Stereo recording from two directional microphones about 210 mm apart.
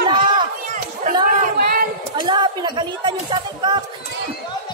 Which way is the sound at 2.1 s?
20° right (ahead or behind).